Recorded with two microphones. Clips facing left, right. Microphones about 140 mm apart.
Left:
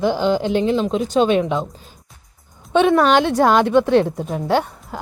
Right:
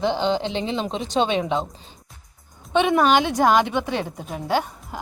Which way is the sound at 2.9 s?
5° right (ahead or behind).